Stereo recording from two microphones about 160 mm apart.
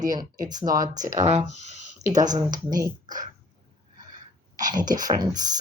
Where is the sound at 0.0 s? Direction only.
25° right (ahead or behind).